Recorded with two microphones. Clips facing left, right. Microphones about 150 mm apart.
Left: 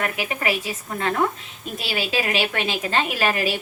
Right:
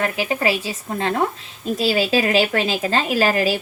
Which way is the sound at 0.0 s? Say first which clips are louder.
Right 5 dB; 30° right (ahead or behind).